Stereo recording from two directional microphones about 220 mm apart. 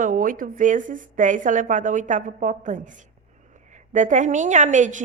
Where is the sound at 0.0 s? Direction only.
35° right (ahead or behind).